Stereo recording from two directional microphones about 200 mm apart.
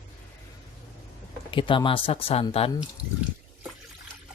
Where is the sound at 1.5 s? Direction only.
25° left (ahead or behind).